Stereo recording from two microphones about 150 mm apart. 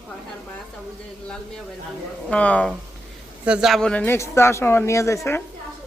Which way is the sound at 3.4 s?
5° right (ahead or behind).